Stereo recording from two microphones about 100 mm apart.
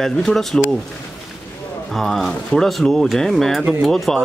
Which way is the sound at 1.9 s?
Centre (ahead or behind).